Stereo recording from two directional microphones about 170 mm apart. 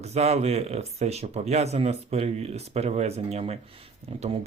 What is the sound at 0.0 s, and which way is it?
Speech, 40° right (ahead or behind).